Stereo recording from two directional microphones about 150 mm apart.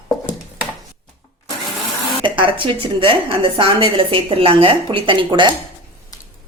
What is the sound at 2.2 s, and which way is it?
A woman's voice, 35° right (ahead or behind).